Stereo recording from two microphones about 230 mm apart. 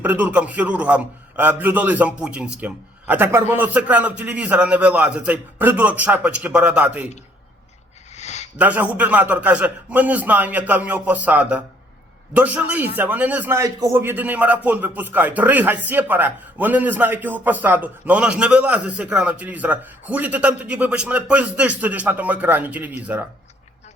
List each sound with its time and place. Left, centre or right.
0.0 s a man's voice: centre
8.1 s a sound: left
8.5 s a man's voice: centre